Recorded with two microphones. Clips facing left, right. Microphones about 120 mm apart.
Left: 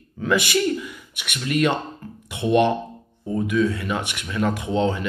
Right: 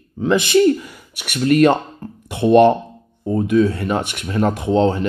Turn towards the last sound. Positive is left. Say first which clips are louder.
# right 6 dB
turn(degrees=-40)  # may be behind; listen again after turning